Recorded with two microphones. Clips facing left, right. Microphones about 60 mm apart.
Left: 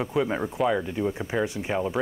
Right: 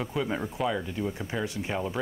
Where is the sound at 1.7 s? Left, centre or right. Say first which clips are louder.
Left 4 dB; centre.